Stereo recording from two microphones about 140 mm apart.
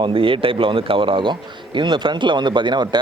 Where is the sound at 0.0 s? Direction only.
40° right (ahead or behind).